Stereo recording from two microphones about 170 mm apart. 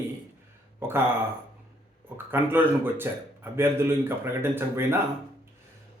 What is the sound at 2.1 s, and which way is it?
Speech, 10° right (ahead or behind).